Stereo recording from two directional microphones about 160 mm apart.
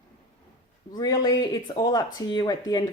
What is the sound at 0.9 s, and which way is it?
Speech, 25° left (ahead or behind).